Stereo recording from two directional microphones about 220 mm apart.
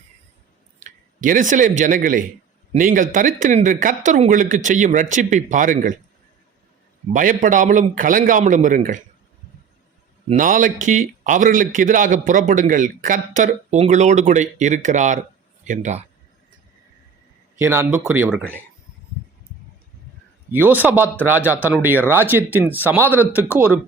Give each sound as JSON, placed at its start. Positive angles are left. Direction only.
{"t": 0.8, "sound": "a man's voice", "side_deg": -35}
{"t": 7.1, "sound": "a man's voice", "side_deg": -35}
{"t": 10.2, "sound": "a man's voice", "side_deg": -35}
{"t": 17.6, "sound": "speech", "side_deg": -10}
{"t": 20.5, "sound": "speech", "side_deg": -10}